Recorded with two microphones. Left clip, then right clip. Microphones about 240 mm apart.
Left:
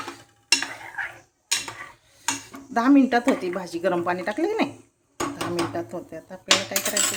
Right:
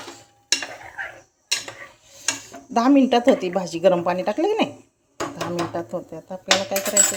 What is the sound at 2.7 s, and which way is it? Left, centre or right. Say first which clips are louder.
Speech: right 2 dB; centre.